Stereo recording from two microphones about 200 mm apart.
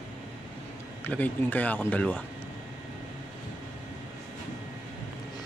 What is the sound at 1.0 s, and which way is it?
Speech, 10° left (ahead or behind).